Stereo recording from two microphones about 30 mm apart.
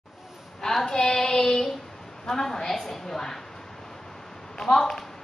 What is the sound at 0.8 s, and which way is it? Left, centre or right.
Child singing, centre.